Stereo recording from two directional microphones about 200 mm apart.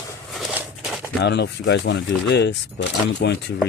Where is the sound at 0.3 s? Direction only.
5° right (ahead or behind).